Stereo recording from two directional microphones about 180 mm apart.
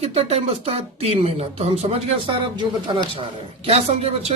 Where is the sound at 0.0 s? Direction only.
35° right (ahead or behind).